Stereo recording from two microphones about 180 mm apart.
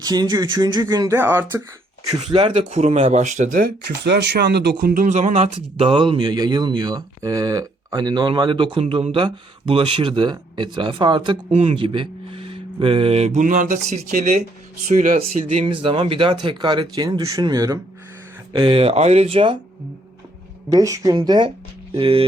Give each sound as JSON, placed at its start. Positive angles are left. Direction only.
{"t": 0.0, "sound": "speech", "side_deg": -20}
{"t": 2.2, "sound": "speech", "side_deg": -30}
{"t": 4.0, "sound": "speech", "side_deg": -70}
{"t": 20.7, "sound": "speech", "side_deg": -20}